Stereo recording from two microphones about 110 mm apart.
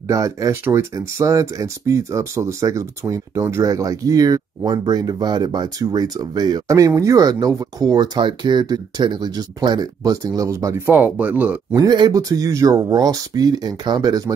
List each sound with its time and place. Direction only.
0.1 s speech: 30° right (ahead or behind)
10.9 s speech: 15° right (ahead or behind)
11.7 s speech: 40° right (ahead or behind)